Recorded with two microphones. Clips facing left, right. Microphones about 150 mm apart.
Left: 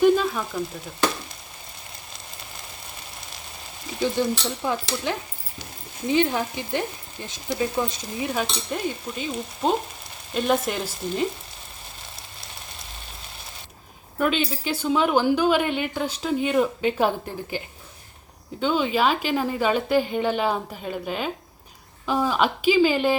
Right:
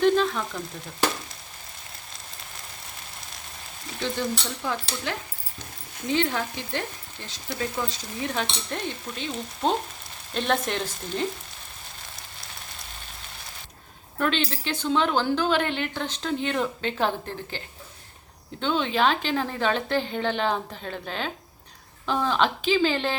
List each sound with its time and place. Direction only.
0.0 s a sound: 5° left (ahead or behind)
4.2 s speech: 15° left (ahead or behind)
8.4 s speech: 5° left (ahead or behind)
14.2 s speech: 10° left (ahead or behind)
18.6 s speech: 5° left (ahead or behind)